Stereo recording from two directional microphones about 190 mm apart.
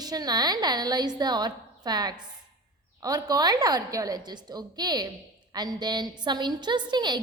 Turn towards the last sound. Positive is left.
turn(degrees=-25)  # may be behind; listen again after turning